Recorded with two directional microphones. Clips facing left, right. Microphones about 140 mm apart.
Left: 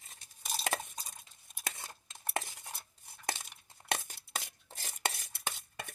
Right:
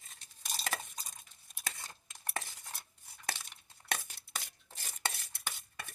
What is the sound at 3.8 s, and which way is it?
Tearing, 25° left (ahead or behind).